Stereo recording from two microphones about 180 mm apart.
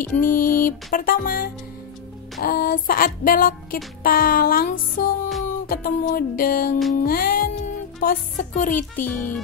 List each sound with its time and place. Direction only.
0.0 s music: 50° left (ahead or behind)
9.0 s speech: 10° left (ahead or behind)